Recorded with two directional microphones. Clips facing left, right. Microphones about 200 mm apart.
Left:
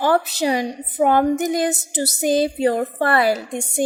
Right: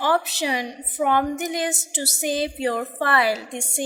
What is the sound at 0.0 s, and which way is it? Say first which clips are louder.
A woman's voice: left 4 dB; 40° left (ahead or behind).